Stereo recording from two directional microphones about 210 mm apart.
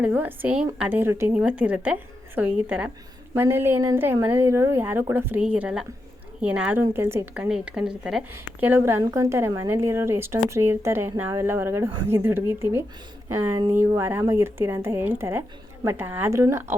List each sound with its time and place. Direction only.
0.0 s a woman's voice: 10° right (ahead or behind)